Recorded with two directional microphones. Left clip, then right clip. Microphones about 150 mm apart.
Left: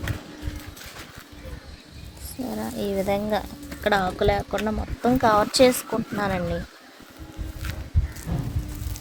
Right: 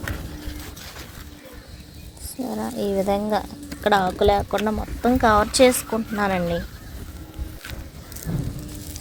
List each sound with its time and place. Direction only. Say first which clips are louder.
2.5 s a woman's voice: right 3 dB; 5° right (ahead or behind); by 6.6 s 25° right (ahead or behind)